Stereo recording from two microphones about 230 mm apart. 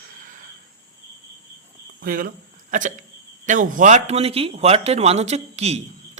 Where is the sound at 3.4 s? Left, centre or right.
Right.